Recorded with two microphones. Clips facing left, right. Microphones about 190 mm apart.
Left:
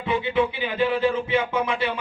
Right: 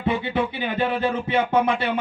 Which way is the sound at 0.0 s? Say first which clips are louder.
Left 1 dB; 45° right (ahead or behind).